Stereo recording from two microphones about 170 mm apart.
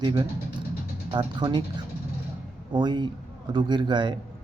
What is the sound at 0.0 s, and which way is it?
A man's voice, 25° right (ahead or behind).